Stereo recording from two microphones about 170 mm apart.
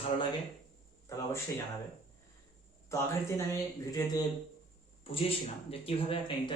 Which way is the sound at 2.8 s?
20° left (ahead or behind).